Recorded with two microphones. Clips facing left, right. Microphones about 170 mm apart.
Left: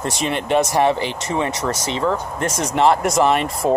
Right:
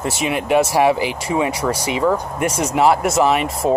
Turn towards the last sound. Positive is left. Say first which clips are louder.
# even
turn(degrees=-5)  # may be behind; listen again after turning